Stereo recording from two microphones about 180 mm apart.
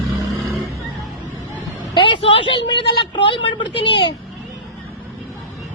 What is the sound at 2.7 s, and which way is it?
Speech, 25° left (ahead or behind).